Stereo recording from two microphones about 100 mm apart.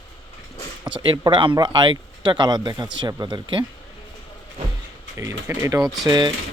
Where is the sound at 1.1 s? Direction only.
40° right (ahead or behind).